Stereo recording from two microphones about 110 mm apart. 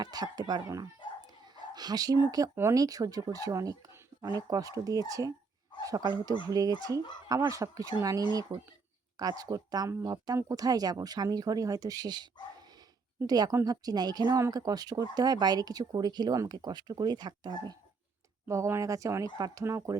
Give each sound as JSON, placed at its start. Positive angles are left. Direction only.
{"t": 0.0, "sound": "speech", "side_deg": -35}
{"t": 1.3, "sound": "dog", "side_deg": -40}
{"t": 2.6, "sound": "a woman's voice", "side_deg": -30}
{"t": 18.4, "sound": "speech", "side_deg": -25}